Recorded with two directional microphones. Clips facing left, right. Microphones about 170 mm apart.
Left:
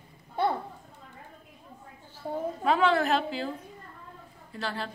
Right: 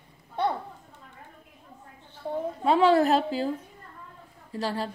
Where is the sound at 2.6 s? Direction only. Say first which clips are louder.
Right 4 dB; 30° right (ahead or behind).